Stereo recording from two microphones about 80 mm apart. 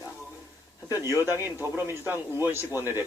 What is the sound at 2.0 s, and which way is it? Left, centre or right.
A man's voice, right.